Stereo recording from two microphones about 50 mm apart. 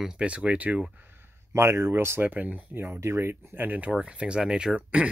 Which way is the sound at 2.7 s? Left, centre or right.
Right.